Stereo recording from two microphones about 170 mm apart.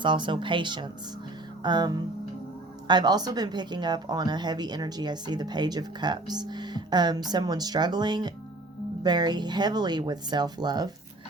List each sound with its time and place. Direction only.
0.0 s speech: 30° right (ahead or behind)